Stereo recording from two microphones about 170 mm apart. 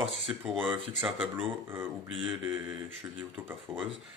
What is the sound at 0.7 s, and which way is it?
Speech, 35° right (ahead or behind).